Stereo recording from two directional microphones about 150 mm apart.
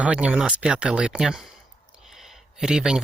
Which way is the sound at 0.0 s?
10° right (ahead or behind).